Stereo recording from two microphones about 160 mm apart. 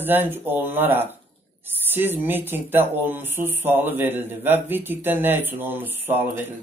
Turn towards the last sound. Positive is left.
turn(degrees=-15)  # may be behind; listen again after turning